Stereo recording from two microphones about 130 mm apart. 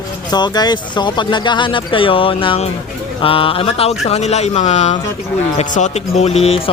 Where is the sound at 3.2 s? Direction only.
45° left (ahead or behind).